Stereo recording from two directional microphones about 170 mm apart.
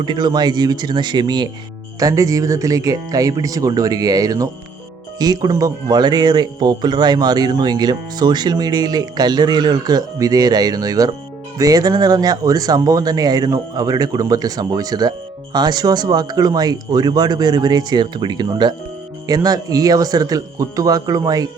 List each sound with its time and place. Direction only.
0.0 s speech: 25° right (ahead or behind)